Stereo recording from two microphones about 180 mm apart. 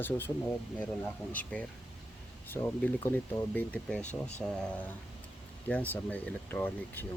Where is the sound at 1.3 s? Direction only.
10° left (ahead or behind).